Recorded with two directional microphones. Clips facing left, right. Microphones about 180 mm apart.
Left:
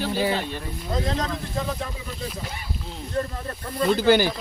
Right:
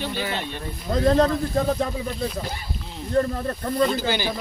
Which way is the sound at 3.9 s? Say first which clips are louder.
Left 7 dB; 55° left (ahead or behind).